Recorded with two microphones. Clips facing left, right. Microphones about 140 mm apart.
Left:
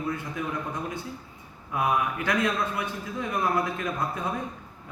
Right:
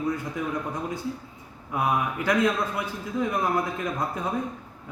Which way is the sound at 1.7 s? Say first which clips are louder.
Even; 20° right (ahead or behind).